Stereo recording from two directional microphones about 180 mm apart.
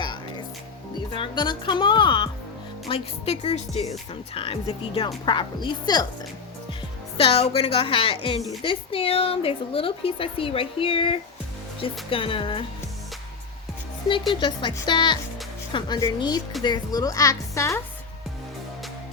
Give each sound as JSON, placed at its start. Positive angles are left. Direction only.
{"t": 0.0, "sound": "music", "side_deg": 25}
{"t": 1.1, "sound": "speech", "side_deg": 25}
{"t": 7.2, "sound": "speech", "side_deg": 30}
{"t": 14.4, "sound": "speech", "side_deg": 25}